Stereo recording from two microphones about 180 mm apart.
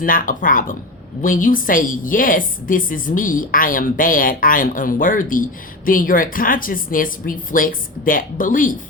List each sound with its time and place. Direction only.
0.0 s a woman's voice: 50° left (ahead or behind)